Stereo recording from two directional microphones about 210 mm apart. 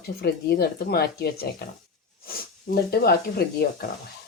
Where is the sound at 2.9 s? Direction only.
45° left (ahead or behind).